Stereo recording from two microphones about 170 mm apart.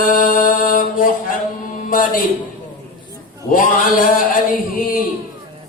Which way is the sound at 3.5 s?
55° left (ahead or behind).